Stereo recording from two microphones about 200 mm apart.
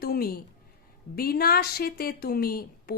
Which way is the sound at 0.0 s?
50° left (ahead or behind).